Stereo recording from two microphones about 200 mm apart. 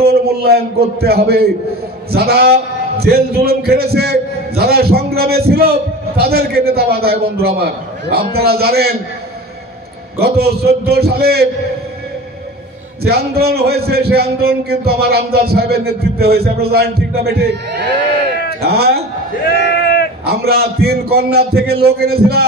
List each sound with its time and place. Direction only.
0.0 s a man's voice: 50° right (ahead or behind)
10.1 s a man's voice: 50° right (ahead or behind)
13.0 s a man's voice: 50° right (ahead or behind)
19.7 s sheep: 50° left (ahead or behind)
20.2 s a man's voice: 50° right (ahead or behind)